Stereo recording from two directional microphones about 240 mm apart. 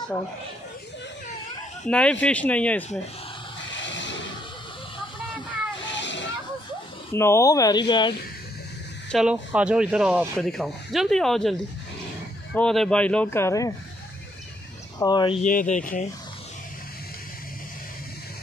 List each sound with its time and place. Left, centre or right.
1.9 s speech: centre
3.8 s a sound: left
5.9 s vehicle: left
7.1 s speech: centre
9.1 s speech: centre
12.5 s speech: centre
15.0 s speech: centre
15.4 s speech: left